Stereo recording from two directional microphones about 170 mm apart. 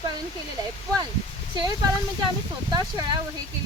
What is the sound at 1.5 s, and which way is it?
Speech, 25° right (ahead or behind).